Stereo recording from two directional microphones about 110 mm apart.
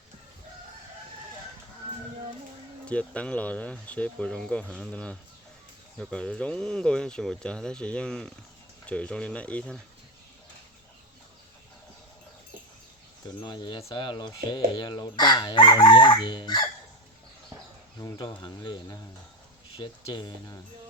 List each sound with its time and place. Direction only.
2.8 s speech: 10° left (ahead or behind)
13.2 s speech: 40° left (ahead or behind)
13.9 s chicken: 45° left (ahead or behind)
18.2 s speech: 40° left (ahead or behind)
19.8 s chicken: 45° left (ahead or behind)